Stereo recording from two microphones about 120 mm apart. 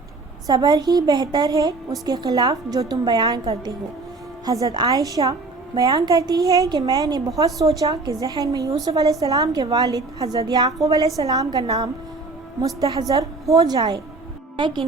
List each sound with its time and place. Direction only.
0.4 s a woman's voice: 30° right (ahead or behind)
4.6 s a woman's voice: 35° right (ahead or behind)
12.6 s a woman's voice: 30° right (ahead or behind)